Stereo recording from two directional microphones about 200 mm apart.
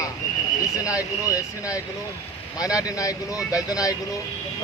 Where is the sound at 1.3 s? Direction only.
15° left (ahead or behind).